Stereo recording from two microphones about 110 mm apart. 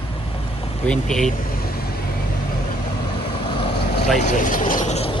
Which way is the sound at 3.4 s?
55° left (ahead or behind).